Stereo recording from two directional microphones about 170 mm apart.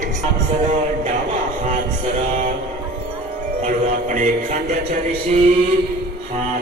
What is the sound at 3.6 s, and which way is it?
A man's voice, 50° right (ahead or behind).